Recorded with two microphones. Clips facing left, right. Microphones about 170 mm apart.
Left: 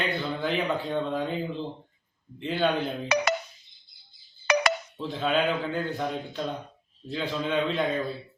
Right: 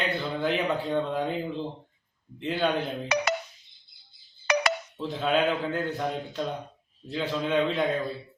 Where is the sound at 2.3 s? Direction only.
Centre (ahead or behind).